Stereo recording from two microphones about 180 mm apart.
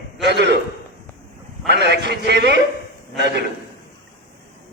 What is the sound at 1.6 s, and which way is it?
Speech, 70° right (ahead or behind).